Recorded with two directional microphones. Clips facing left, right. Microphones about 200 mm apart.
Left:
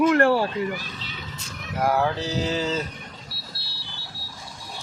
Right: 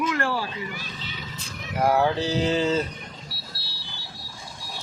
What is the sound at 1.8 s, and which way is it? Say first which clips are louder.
Mantra: right 2 dB; centre (ahead or behind).